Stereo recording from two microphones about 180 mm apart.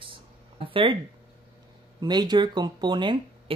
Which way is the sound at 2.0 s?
25° right (ahead or behind).